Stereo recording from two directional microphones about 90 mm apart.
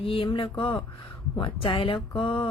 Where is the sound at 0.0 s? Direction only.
85° left.